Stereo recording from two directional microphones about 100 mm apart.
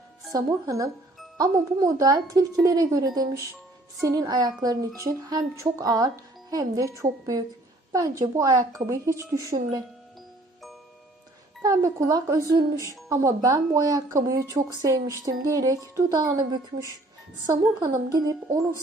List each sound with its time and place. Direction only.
0.3 s a woman's voice: 35° right (ahead or behind)
11.6 s a woman's voice: 35° right (ahead or behind)
17.5 s speech: 40° right (ahead or behind)